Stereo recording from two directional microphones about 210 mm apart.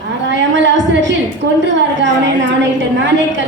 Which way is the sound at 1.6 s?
60° right (ahead or behind).